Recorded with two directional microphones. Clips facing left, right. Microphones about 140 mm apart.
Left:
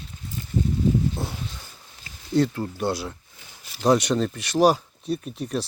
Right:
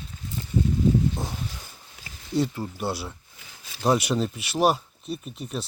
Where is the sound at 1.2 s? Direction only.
20° right (ahead or behind).